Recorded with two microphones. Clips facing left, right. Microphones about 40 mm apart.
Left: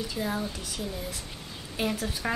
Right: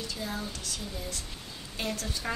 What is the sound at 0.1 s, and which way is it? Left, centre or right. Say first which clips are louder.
A woman's voice: left 5 dB; centre.